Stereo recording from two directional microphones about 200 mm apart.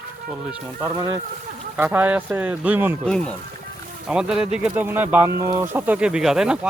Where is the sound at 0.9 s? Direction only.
15° right (ahead or behind).